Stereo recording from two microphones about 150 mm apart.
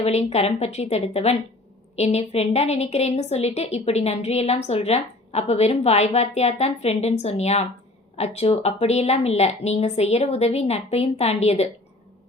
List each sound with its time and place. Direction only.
0.0 s a woman's voice: 45° left (ahead or behind)